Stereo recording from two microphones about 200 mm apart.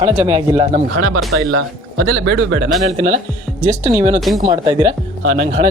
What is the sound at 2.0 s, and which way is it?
Speech, 65° right (ahead or behind).